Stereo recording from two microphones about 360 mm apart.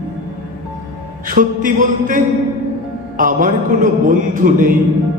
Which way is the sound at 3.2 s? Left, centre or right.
Right.